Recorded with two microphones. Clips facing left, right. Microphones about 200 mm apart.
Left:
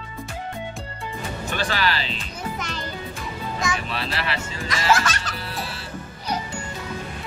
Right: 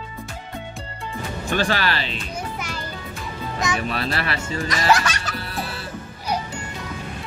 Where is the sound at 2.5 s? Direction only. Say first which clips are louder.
Even; 10° right (ahead or behind).